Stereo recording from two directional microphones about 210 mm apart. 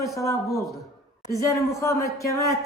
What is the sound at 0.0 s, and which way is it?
Speech, 15° left (ahead or behind).